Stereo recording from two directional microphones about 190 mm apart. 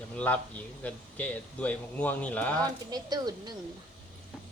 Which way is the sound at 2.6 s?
20° right (ahead or behind).